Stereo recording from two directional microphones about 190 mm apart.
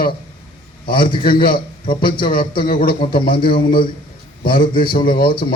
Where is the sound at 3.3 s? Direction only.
25° left (ahead or behind).